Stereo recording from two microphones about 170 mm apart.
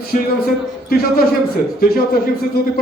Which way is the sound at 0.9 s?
60° left (ahead or behind).